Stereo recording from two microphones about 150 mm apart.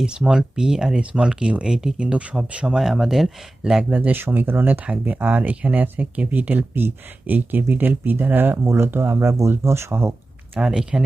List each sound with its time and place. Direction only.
0.0 s speech: 5° right (ahead or behind)